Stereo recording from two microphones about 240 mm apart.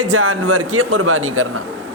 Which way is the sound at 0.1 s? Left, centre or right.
Right.